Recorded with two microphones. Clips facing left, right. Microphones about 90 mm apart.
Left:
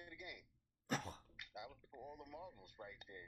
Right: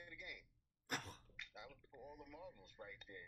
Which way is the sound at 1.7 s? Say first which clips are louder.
Left 3 dB; 25° left (ahead or behind).